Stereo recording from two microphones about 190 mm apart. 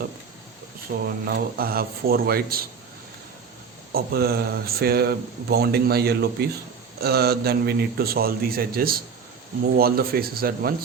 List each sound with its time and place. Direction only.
0.9 s a man's voice: 55° right (ahead or behind)
3.9 s a man's voice: 55° right (ahead or behind)